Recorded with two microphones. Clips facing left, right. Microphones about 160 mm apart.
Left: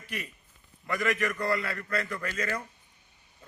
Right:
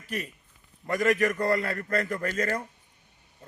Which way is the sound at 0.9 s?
40° right (ahead or behind).